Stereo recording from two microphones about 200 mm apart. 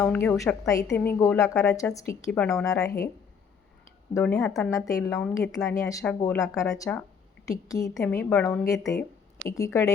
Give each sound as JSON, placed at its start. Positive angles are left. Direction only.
{"t": 0.0, "sound": "a woman's voice", "side_deg": 10}
{"t": 4.1, "sound": "speech", "side_deg": 5}
{"t": 4.5, "sound": "a woman's voice", "side_deg": 15}